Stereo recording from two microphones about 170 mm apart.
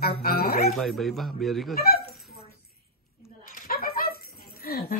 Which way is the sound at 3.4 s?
60° left (ahead or behind).